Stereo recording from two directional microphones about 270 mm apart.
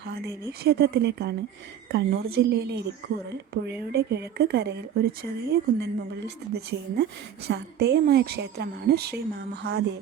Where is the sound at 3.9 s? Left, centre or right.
Right.